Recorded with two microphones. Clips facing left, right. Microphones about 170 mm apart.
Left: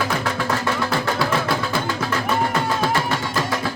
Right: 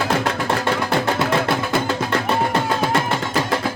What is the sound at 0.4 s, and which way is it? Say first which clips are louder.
Music: right 2 dB; 25° right (ahead or behind).